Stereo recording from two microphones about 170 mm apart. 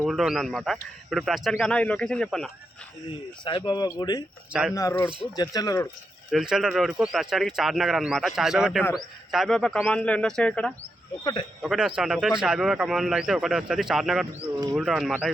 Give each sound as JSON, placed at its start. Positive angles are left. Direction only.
{"t": 0.0, "sound": "speech", "side_deg": 0}
{"t": 3.4, "sound": "speech", "side_deg": 25}
{"t": 6.3, "sound": "speech", "side_deg": -5}
{"t": 11.2, "sound": "speech", "side_deg": 25}
{"t": 11.6, "sound": "speech", "side_deg": 0}